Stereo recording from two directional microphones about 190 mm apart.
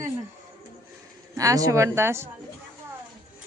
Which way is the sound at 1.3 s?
15° right (ahead or behind).